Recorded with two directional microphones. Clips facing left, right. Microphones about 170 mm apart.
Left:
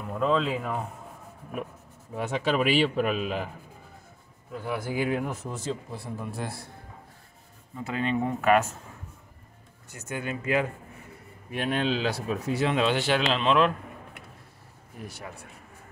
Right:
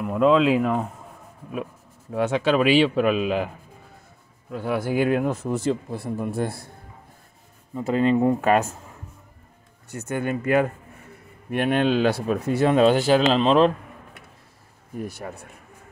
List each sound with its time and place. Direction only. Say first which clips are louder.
0.0 s speech: right 8 dB; 85° right
2.1 s a man's voice: right 6 dB; 90° right
4.5 s speech: right 7 dB; 70° right (ahead or behind); by 6.5 s 55° right (ahead or behind)
7.7 s speech: right 8 dB; 40° right (ahead or behind)
9.8 s speech: right 7 dB; 50° right (ahead or behind); by 13.7 s 35° right (ahead or behind)
15.2 s speech: right 6 dB; 45° right (ahead or behind)